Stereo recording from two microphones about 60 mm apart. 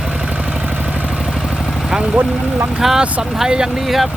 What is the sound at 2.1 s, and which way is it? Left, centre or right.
Speech, right.